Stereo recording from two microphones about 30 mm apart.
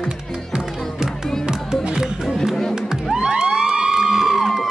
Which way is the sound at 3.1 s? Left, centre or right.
Right.